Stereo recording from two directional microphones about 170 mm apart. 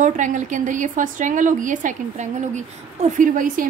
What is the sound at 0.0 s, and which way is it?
A woman's voice, 45° right (ahead or behind).